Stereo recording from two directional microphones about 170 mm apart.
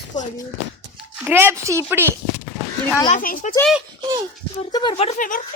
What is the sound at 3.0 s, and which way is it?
Speech, 50° left (ahead or behind).